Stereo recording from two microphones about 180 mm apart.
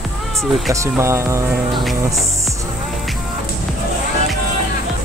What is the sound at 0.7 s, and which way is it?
Speech, 15° right (ahead or behind).